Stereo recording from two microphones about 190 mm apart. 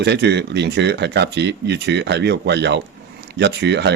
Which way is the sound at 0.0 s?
65° right (ahead or behind).